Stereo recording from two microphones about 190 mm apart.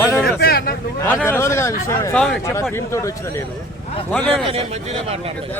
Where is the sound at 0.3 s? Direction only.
55° left (ahead or behind).